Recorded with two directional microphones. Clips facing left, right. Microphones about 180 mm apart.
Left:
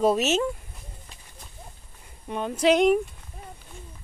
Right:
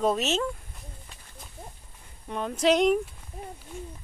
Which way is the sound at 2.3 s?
5° left (ahead or behind).